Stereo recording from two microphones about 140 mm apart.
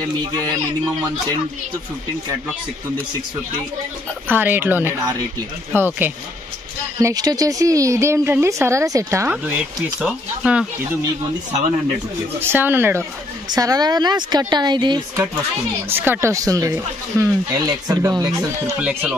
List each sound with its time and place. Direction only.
4.3 s speech: 15° right (ahead or behind)
7.0 s speech: 25° right (ahead or behind); by 10.7 s 5° right (ahead or behind)
12.4 s speech: 15° right (ahead or behind)
13.5 s a woman's voice: 25° right (ahead or behind)
15.9 s speech: 15° right (ahead or behind)
18.8 s speech: 10° right (ahead or behind)